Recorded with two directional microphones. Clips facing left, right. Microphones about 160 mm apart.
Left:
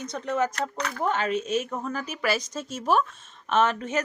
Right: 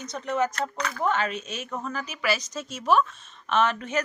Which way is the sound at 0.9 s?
35° left (ahead or behind).